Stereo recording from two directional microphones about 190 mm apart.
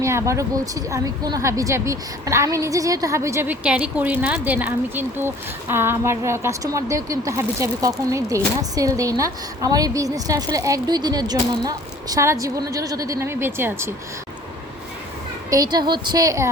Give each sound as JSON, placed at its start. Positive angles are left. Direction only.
{"t": 0.0, "sound": "a woman's voice", "side_deg": -15}
{"t": 15.4, "sound": "a woman's voice", "side_deg": -20}